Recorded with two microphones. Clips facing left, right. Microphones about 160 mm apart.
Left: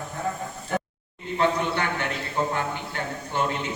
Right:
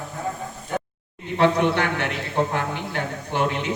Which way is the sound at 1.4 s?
75° right (ahead or behind).